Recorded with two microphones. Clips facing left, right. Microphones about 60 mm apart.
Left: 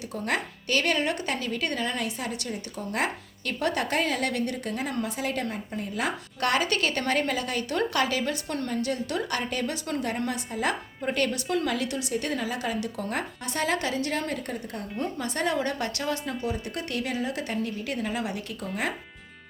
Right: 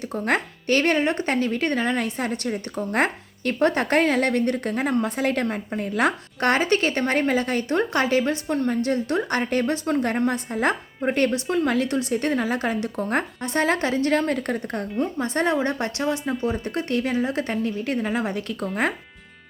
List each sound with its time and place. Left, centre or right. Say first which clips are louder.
0.0 s a woman's voice: right 6 dB; right
6.4 s a woman's voice: right 5 dB; right
15.2 s a woman's voice: right 5 dB; right
16.5 s a woman's voice: right 6 dB; right